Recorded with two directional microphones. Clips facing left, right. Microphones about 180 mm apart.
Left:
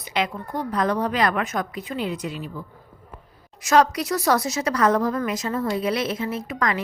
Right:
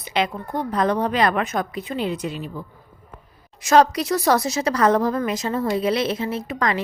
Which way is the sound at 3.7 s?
30° right (ahead or behind).